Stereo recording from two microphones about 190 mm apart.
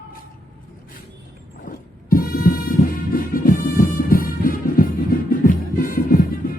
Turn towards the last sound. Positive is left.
turn(degrees=50)  # may be behind; listen again after turning